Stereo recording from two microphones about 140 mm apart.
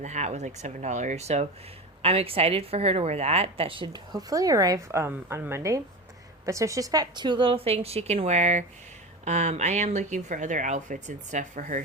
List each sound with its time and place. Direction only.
0.0 s a woman's voice: 55° right (ahead or behind)